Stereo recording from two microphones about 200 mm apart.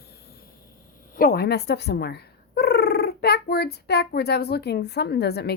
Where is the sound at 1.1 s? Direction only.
45° left (ahead or behind).